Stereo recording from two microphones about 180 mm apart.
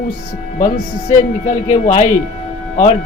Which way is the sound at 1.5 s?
40° left (ahead or behind).